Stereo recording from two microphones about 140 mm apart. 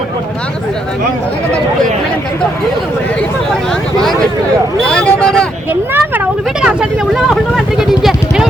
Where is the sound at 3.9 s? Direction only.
5° left (ahead or behind).